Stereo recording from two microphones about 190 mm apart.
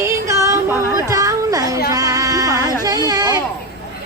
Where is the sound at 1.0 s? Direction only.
15° right (ahead or behind).